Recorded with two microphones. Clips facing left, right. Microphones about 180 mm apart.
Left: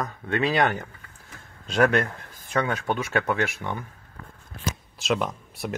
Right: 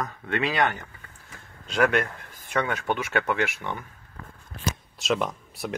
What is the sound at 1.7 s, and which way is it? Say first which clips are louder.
Speech: left 2 dB; 35° left (ahead or behind).